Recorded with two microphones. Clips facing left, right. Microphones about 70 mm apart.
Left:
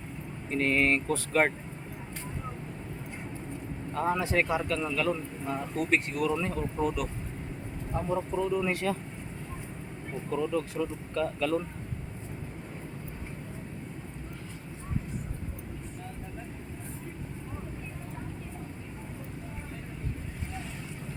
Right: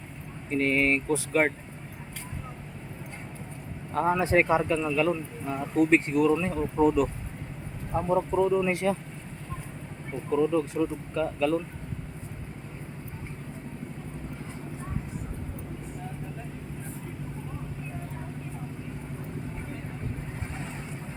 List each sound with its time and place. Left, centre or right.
0.5 s speech: centre
4.2 s speech: right
4.8 s speech: centre
5.9 s speech: right
6.4 s speech: centre
6.7 s speech: right
10.2 s speech: centre